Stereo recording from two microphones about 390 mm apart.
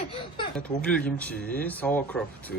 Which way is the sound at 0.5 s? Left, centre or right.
Centre.